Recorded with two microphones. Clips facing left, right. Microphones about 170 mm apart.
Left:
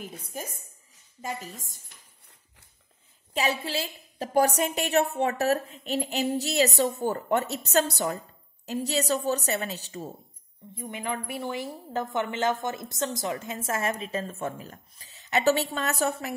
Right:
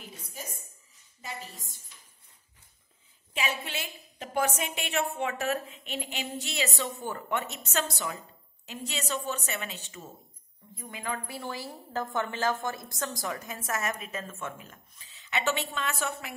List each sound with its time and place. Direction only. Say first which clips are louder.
0.0 s a woman's voice: left 6 dB; 50° left (ahead or behind)
3.3 s a woman's voice: left 6 dB; 35° left (ahead or behind)
10.8 s speech: left 4 dB; 25° left (ahead or behind)